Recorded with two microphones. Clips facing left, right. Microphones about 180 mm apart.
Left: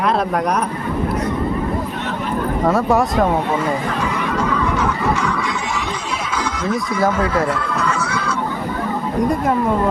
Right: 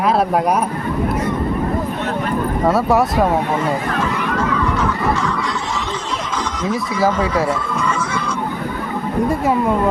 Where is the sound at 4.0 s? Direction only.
15° left (ahead or behind).